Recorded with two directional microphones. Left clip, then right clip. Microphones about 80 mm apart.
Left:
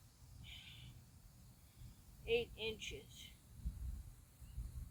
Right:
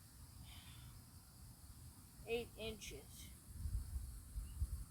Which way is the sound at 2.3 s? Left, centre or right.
Right.